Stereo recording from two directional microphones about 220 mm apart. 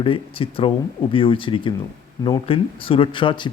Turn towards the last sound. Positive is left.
turn(degrees=20)  # may be behind; listen again after turning